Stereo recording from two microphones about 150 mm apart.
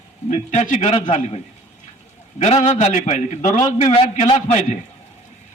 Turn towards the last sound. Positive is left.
turn(degrees=45)  # may be behind; listen again after turning